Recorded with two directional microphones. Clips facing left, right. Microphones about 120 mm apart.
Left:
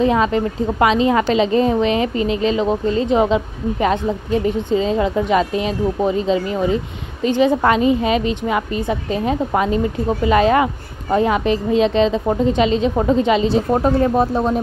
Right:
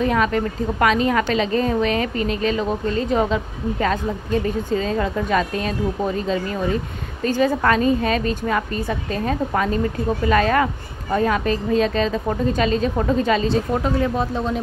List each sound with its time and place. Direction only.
0.0 s a woman's voice: 25° left (ahead or behind)
13.7 s speech: 40° left (ahead or behind)